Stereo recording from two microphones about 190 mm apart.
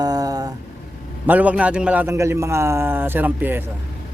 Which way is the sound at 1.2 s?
10° right (ahead or behind).